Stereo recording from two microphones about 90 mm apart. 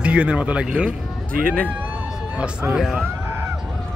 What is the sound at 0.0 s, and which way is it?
Speech, 15° right (ahead or behind).